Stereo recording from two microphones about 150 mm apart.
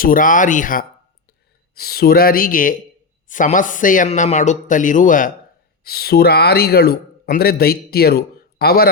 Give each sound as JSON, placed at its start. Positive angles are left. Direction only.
{"t": 0.0, "sound": "speech", "side_deg": 65}
{"t": 1.7, "sound": "speech", "side_deg": 90}
{"t": 5.8, "sound": "speech", "side_deg": 90}